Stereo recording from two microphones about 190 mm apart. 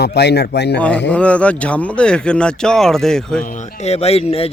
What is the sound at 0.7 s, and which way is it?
A man's voice, 5° left (ahead or behind).